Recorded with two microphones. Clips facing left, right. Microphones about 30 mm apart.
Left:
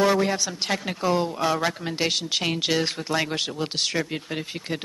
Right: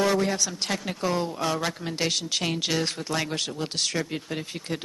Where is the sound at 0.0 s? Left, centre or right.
Centre.